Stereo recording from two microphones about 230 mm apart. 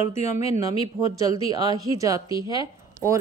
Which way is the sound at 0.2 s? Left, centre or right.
Left.